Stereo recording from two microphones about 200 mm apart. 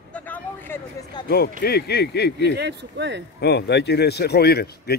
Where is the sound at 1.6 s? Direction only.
50° left (ahead or behind).